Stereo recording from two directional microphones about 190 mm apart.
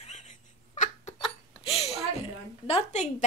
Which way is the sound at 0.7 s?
35° left (ahead or behind).